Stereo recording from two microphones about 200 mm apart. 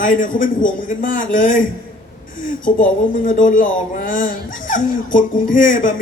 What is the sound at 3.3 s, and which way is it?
Speech, 40° left (ahead or behind).